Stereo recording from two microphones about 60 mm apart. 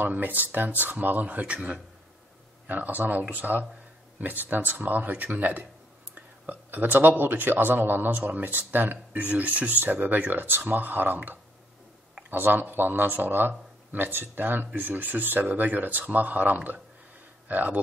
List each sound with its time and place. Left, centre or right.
0.0 s a man's voice: right